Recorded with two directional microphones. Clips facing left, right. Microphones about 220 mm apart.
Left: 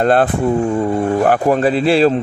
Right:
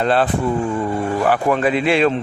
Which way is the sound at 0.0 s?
50° left (ahead or behind).